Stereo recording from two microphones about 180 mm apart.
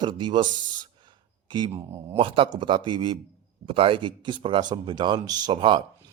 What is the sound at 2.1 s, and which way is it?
Speech, 30° right (ahead or behind).